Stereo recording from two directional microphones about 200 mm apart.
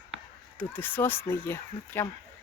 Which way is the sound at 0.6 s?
10° left (ahead or behind).